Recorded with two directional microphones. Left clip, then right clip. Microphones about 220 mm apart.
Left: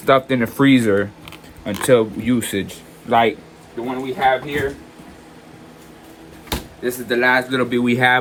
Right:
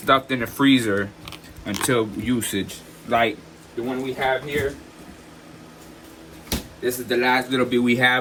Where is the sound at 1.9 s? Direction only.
20° left (ahead or behind).